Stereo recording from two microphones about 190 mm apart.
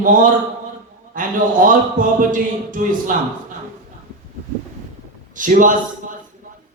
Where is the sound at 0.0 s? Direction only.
45° right (ahead or behind).